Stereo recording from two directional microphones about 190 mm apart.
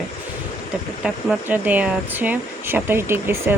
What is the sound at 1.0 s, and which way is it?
Speech, 5° right (ahead or behind).